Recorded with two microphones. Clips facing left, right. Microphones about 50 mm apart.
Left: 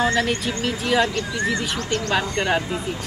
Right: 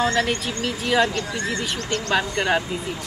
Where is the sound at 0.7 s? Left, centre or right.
Centre.